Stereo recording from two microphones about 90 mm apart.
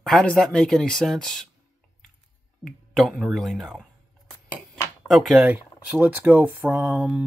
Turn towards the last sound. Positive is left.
turn(degrees=-15)  # may be behind; listen again after turning